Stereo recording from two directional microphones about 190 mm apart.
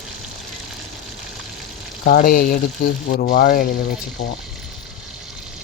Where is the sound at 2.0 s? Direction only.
50° left (ahead or behind).